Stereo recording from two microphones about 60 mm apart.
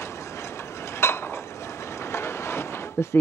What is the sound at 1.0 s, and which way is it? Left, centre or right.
Dishes, left.